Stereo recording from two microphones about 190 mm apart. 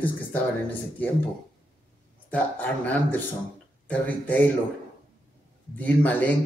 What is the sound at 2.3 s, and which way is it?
Speech, 10° left (ahead or behind).